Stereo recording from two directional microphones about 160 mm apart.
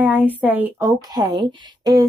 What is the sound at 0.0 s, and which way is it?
Speech, 10° right (ahead or behind).